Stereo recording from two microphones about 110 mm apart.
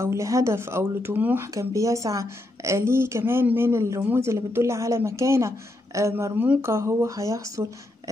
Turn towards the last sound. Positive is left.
turn(degrees=-30)  # may be behind; listen again after turning